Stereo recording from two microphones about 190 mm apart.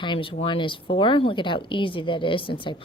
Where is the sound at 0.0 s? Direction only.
25° left (ahead or behind).